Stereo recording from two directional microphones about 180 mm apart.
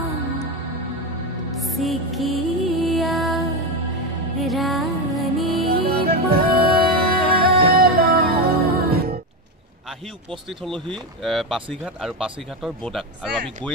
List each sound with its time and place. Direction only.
1.6 s music: centre (ahead or behind)
5.7 s music: 60° right (ahead or behind)
10.6 s speech: 5° left (ahead or behind)